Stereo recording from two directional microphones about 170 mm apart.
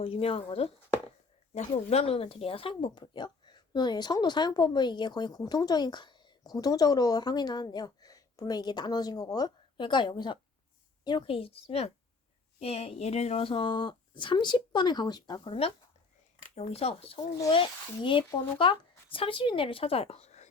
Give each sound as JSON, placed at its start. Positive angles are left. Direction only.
{"t": 0.0, "sound": "speech", "side_deg": 35}